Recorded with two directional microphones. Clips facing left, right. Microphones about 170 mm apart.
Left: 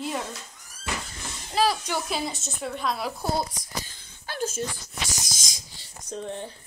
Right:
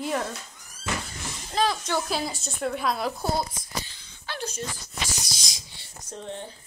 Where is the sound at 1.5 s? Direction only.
10° left (ahead or behind).